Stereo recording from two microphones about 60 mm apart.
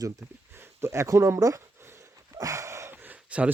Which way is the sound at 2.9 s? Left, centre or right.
Right.